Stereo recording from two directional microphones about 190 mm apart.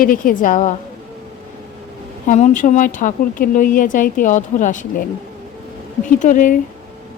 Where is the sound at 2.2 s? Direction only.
40° left (ahead or behind).